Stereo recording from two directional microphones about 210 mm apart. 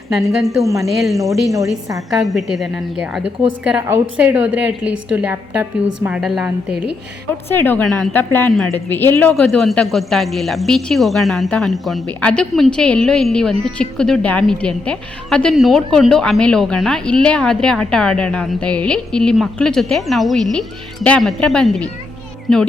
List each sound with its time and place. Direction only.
0.2 s a woman's voice: centre (ahead or behind)
0.6 s a woman's voice: 15° right (ahead or behind)
0.9 s a woman's voice: centre (ahead or behind)
1.9 s a woman's voice: 15° right (ahead or behind)
2.2 s a woman's voice: centre (ahead or behind)
7.5 s a woman's voice: 10° left (ahead or behind)